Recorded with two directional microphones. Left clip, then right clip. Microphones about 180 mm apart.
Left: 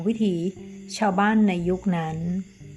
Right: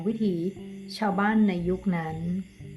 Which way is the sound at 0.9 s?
35° left (ahead or behind).